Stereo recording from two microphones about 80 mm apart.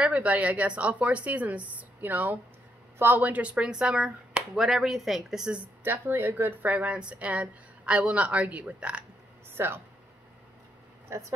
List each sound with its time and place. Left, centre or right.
0.0 s speech: centre
5.9 s speech: right
9.6 s speech: right
11.1 s speech: right